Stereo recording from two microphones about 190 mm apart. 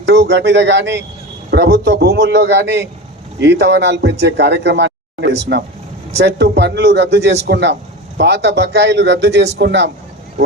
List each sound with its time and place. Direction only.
0.0 s a man's voice: 65° right (ahead or behind)